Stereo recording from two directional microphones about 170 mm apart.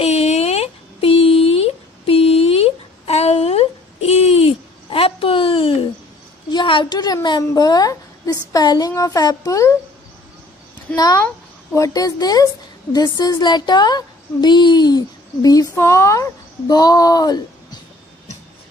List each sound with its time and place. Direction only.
0.0 s a sound: 40° left (ahead or behind)
6.5 s a woman's voice: 30° left (ahead or behind)
11.0 s a woman's voice: 20° left (ahead or behind)